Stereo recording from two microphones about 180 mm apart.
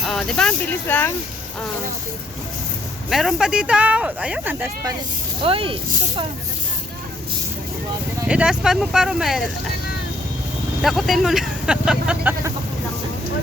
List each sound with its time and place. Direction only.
0.1 s speech: 5° left (ahead or behind)
3.1 s speech: centre (ahead or behind)
5.4 s speech: 30° right (ahead or behind)
8.3 s speech: 5° right (ahead or behind)
10.8 s speech: centre (ahead or behind)